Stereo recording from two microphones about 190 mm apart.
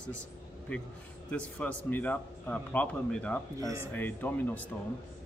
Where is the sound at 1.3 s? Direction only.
10° left (ahead or behind).